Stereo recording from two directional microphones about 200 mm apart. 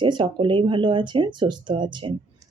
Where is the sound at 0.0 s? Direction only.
25° right (ahead or behind).